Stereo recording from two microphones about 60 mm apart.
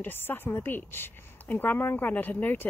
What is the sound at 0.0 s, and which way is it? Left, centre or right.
Speech, left.